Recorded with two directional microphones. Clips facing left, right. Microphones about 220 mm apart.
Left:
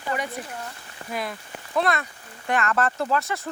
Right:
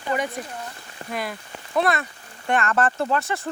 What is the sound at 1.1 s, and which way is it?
Speech, centre (ahead or behind).